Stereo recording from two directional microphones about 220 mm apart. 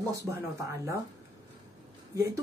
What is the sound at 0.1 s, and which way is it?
Speech, 15° right (ahead or behind).